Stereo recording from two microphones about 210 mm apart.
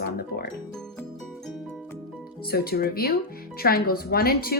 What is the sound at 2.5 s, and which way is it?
A woman's voice, 45° left (ahead or behind).